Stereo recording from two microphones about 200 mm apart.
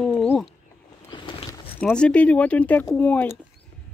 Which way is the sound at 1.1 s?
25° left (ahead or behind).